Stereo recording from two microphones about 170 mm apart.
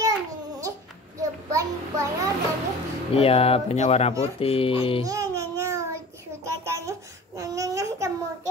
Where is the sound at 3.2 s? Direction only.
35° left (ahead or behind).